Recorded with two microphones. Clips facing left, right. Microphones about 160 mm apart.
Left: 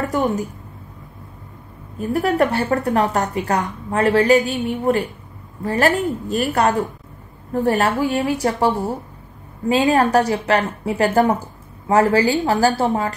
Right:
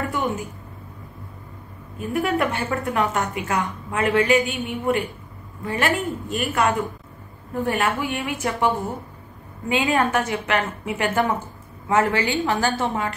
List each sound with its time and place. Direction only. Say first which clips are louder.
0.1 s a woman's voice: left 5 dB; 40° left (ahead or behind)
2.0 s a woman's voice: left 5 dB; 35° left (ahead or behind)